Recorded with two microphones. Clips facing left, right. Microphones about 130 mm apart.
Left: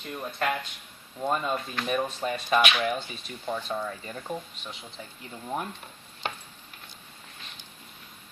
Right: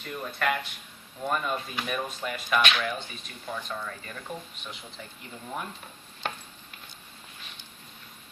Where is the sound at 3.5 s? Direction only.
30° left (ahead or behind).